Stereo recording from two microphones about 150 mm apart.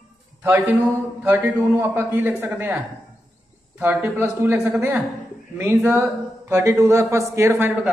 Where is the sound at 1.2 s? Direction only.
15° right (ahead or behind).